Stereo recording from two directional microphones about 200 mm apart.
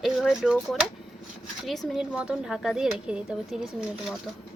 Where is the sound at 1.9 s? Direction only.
5° right (ahead or behind).